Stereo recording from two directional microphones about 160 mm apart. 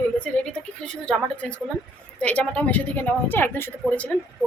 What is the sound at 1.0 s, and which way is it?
A woman's voice, 5° left (ahead or behind).